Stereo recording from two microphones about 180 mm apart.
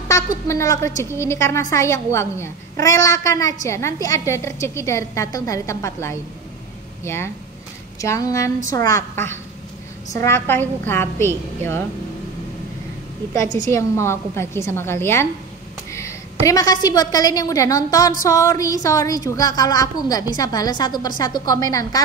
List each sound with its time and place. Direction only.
0.5 s a woman's voice: 15° left (ahead or behind)
8.0 s a woman's voice: 15° left (ahead or behind)
13.3 s a woman's voice: 15° left (ahead or behind)